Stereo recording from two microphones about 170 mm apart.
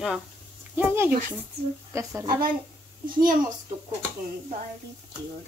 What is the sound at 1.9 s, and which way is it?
Speech, 15° right (ahead or behind).